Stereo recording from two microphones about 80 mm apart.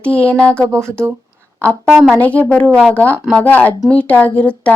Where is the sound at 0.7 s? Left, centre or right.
Right.